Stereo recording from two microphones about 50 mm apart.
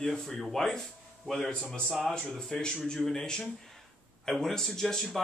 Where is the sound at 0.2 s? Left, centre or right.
Centre.